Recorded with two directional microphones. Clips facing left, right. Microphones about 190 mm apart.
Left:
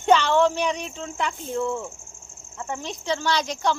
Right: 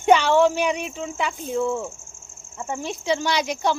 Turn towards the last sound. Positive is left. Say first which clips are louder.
# right 1 dB
turn(degrees=-10)  # may be behind; listen again after turning